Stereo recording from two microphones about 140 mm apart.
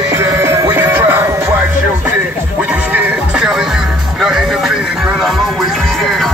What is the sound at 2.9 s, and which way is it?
Music, 5° right (ahead or behind).